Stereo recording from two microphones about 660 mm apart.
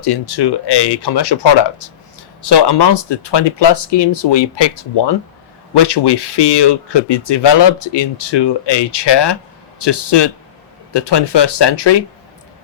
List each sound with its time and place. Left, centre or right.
0.0 s speech: left